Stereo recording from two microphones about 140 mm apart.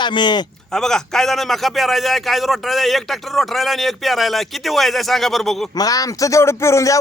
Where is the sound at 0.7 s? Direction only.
5° left (ahead or behind).